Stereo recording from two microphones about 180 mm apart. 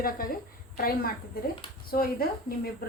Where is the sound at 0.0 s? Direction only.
50° left (ahead or behind).